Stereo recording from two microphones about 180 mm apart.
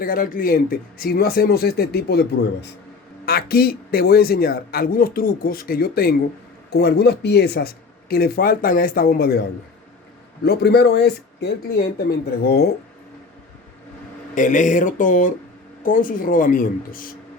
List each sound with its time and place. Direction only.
0.0 s a man's voice: 50° left (ahead or behind)
10.4 s a man's voice: 65° left (ahead or behind)
14.3 s speech: 45° left (ahead or behind)